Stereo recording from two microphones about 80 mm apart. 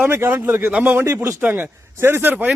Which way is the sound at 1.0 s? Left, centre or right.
Right.